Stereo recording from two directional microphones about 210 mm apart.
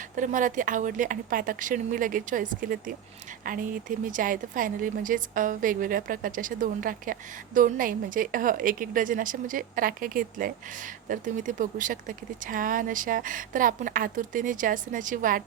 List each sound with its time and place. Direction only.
0.2 s a woman's voice: 40° right (ahead or behind)